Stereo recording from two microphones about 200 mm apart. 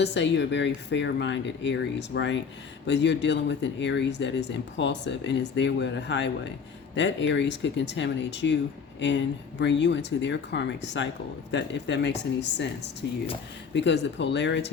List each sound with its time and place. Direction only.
0.0 s speech: 60° left (ahead or behind)